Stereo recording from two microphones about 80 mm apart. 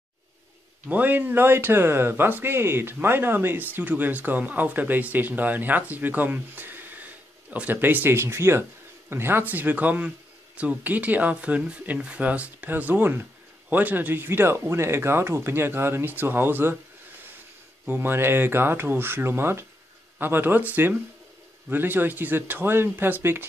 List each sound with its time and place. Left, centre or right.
0.8 s a man's voice: right
17.8 s a man's voice: right